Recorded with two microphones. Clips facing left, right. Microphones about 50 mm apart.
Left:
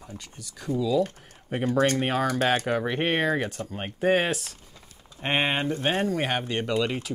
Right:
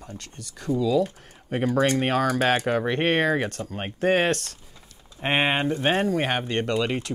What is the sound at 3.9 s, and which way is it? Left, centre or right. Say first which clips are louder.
Speech: right 2 dB; centre.